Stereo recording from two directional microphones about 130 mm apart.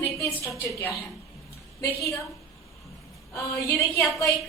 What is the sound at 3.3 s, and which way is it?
Speech, 25° left (ahead or behind).